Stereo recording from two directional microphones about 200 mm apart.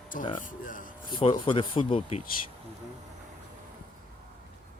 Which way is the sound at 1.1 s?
25° left (ahead or behind).